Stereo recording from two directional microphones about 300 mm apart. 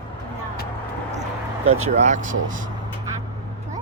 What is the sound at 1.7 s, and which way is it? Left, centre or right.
Speech, right.